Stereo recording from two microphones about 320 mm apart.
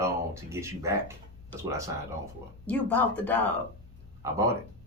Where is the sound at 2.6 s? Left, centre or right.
Centre.